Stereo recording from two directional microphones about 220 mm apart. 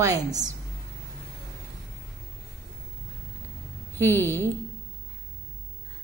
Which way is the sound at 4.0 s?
10° left (ahead or behind).